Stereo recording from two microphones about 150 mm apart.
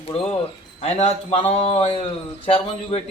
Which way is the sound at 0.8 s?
45° left (ahead or behind).